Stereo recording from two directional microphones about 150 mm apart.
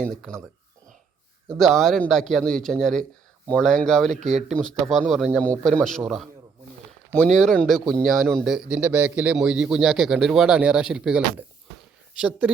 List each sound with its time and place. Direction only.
0.0 s a man's voice: centre (ahead or behind)
1.5 s a man's voice: centre (ahead or behind)
7.3 s a man's voice: 5° left (ahead or behind)